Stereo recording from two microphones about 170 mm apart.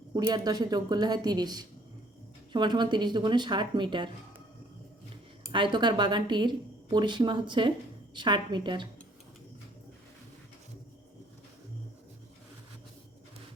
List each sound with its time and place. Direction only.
0.1 s speech: 25° right (ahead or behind)
5.5 s speech: 30° right (ahead or behind)